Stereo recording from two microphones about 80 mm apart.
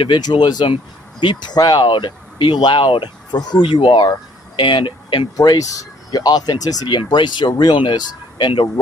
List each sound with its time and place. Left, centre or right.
0.0 s speech: left
3.6 s speech: left
5.4 s speech: left
6.9 s speech: left